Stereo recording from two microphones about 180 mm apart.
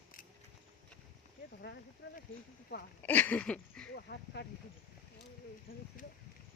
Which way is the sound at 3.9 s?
70° left (ahead or behind).